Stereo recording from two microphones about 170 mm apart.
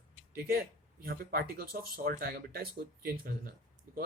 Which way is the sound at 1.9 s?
60° right (ahead or behind).